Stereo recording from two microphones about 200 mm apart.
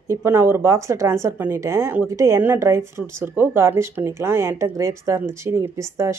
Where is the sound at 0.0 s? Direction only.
15° right (ahead or behind).